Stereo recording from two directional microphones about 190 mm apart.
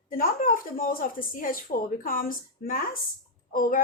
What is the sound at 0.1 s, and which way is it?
Speech, 50° left (ahead or behind).